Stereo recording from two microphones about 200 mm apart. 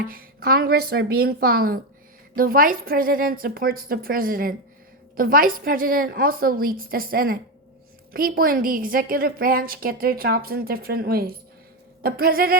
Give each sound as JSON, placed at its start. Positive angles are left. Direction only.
{"t": 0.0, "sound": "a woman's voice", "side_deg": -45}